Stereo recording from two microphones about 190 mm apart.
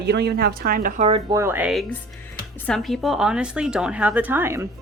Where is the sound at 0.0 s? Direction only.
60° right (ahead or behind); by 1.2 s 35° right (ahead or behind).